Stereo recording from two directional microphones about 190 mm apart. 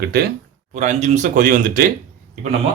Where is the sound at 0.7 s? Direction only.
40° right (ahead or behind).